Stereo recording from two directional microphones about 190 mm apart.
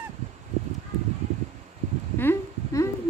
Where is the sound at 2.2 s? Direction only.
15° left (ahead or behind).